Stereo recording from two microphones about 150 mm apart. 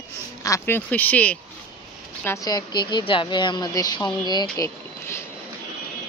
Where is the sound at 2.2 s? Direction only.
20° left (ahead or behind).